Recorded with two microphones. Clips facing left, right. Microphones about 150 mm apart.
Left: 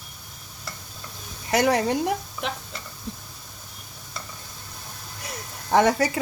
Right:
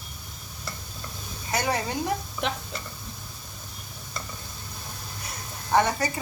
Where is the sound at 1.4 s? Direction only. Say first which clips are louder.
Left 7 dB; 75° left (ahead or behind).